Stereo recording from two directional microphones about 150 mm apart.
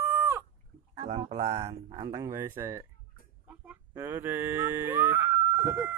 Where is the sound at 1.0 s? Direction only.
35° right (ahead or behind).